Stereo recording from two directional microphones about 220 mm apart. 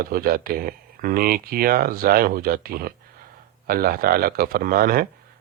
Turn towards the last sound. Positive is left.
turn(degrees=-40)  # may be behind; listen again after turning